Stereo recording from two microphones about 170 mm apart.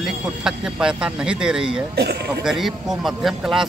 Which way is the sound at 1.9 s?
70° right (ahead or behind).